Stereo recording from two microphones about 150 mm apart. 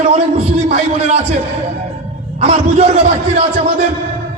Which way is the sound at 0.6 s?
45° right (ahead or behind).